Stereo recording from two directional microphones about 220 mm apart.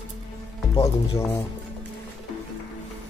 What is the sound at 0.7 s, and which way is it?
Speech, 15° left (ahead or behind).